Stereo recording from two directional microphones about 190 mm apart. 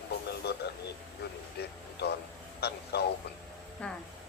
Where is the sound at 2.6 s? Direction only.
60° left (ahead or behind).